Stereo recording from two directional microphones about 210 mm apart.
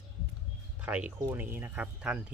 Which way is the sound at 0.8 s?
5° right (ahead or behind).